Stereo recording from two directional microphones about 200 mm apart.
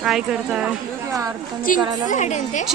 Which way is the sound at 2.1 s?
35° left (ahead or behind).